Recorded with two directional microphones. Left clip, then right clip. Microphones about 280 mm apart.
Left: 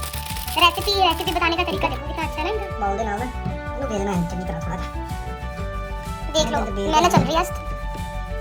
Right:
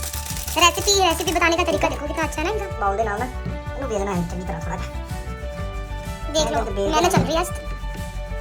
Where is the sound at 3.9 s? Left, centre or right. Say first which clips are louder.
Right 2 dB; centre.